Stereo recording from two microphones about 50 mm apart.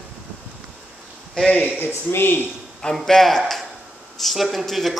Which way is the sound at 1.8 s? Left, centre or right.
Left.